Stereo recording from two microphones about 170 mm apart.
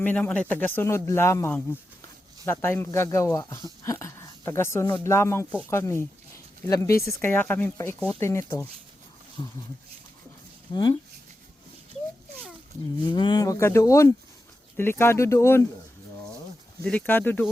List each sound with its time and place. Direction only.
0.0 s speech: 10° left (ahead or behind)
9.4 s speech: 25° left (ahead or behind)
10.7 s speech: 25° left (ahead or behind)
13.1 s speech: 25° left (ahead or behind)
16.8 s speech: 10° left (ahead or behind)